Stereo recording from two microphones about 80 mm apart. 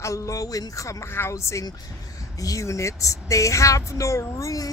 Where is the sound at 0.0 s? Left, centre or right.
Left.